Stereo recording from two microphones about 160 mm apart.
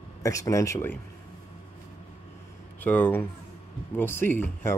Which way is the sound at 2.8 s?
10° left (ahead or behind).